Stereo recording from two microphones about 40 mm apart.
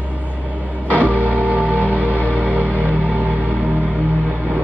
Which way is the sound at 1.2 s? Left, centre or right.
Right.